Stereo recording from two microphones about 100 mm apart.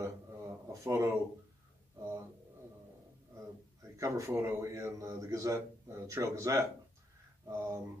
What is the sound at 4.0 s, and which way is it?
Speech, 25° right (ahead or behind).